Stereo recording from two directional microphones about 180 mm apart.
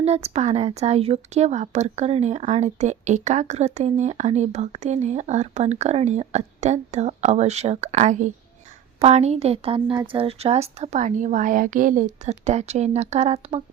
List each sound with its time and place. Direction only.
0.0 s speech: 35° right (ahead or behind)